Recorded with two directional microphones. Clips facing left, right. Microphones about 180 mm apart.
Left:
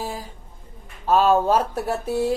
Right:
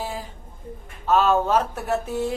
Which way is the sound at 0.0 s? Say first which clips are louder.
Even; 40° left (ahead or behind).